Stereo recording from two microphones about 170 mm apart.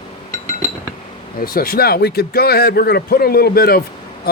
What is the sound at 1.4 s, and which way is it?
A man's voice, 60° left (ahead or behind).